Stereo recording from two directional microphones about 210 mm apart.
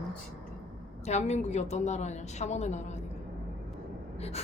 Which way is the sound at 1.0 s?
30° left (ahead or behind).